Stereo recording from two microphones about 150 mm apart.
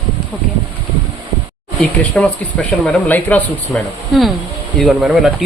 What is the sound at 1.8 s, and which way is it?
Speech, 5° left (ahead or behind).